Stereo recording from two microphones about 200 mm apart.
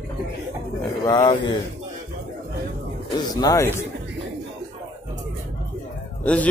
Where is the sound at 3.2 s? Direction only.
20° left (ahead or behind).